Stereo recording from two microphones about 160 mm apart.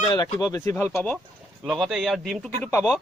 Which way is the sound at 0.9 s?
5° left (ahead or behind).